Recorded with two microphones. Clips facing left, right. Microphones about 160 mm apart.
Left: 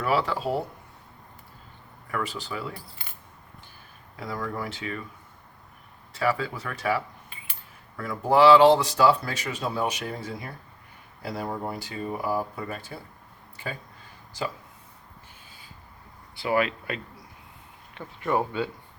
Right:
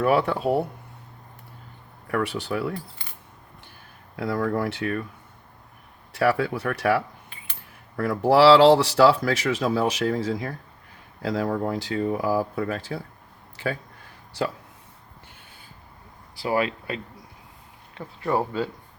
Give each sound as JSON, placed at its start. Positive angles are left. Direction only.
{"t": 0.0, "sound": "speech", "side_deg": -55}
{"t": 2.0, "sound": "speech", "side_deg": -65}
{"t": 4.2, "sound": "speech", "side_deg": -65}
{"t": 6.1, "sound": "speech", "side_deg": -65}
{"t": 16.3, "sound": "speech", "side_deg": -35}